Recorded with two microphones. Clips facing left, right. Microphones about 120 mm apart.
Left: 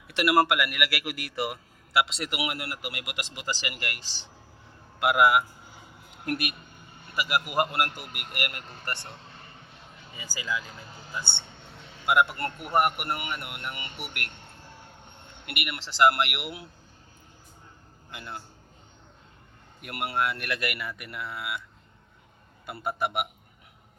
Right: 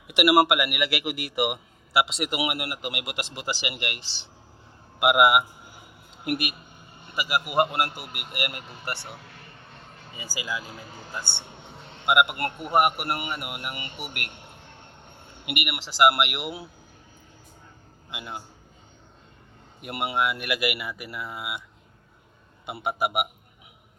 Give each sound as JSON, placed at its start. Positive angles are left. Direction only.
{"t": 0.2, "sound": "a man's voice", "side_deg": -15}
{"t": 4.9, "sound": "a sound", "side_deg": -15}
{"t": 6.2, "sound": "a man's voice", "side_deg": -10}
{"t": 9.5, "sound": "vehicle", "side_deg": -55}
{"t": 10.2, "sound": "speech", "side_deg": -10}
{"t": 11.9, "sound": "a man's voice", "side_deg": -15}
{"t": 12.7, "sound": "a man's voice", "side_deg": -5}
{"t": 18.1, "sound": "speech", "side_deg": -10}
{"t": 19.8, "sound": "speech", "side_deg": -10}